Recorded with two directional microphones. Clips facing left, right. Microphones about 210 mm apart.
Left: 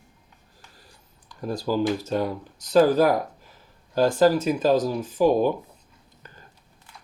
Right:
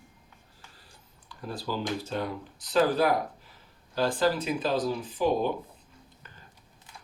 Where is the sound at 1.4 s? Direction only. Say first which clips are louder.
Left 9 dB; 45° left (ahead or behind).